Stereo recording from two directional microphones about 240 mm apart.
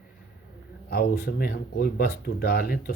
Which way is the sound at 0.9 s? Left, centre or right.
Left.